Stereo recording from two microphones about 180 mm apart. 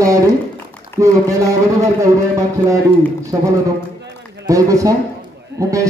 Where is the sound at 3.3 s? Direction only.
15° right (ahead or behind).